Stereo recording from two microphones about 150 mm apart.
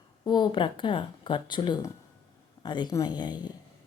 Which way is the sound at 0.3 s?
30° left (ahead or behind).